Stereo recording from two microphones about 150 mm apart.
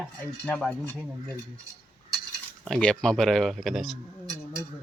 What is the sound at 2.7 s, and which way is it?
Speech, 5° left (ahead or behind).